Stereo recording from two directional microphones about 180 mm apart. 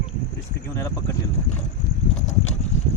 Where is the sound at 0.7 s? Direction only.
15° left (ahead or behind).